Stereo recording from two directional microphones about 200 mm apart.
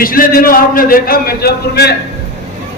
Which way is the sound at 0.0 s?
45° left (ahead or behind).